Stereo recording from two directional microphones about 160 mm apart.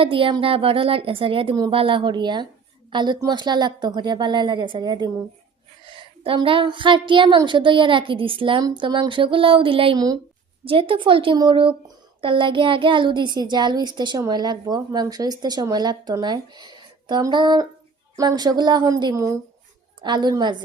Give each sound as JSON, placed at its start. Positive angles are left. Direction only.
{"t": 0.0, "sound": "a woman's voice", "side_deg": -35}